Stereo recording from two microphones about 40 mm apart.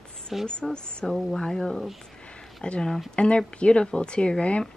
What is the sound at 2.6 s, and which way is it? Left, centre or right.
Speech, left.